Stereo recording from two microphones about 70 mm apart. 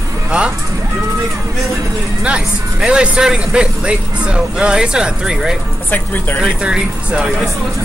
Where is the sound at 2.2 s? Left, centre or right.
Centre.